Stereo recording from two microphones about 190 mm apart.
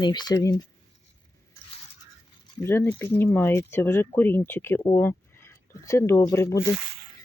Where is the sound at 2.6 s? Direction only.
15° left (ahead or behind).